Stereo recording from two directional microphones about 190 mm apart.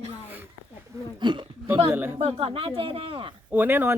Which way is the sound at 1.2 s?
25° right (ahead or behind).